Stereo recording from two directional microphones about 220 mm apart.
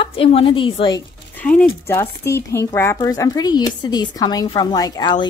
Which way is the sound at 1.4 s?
5° left (ahead or behind).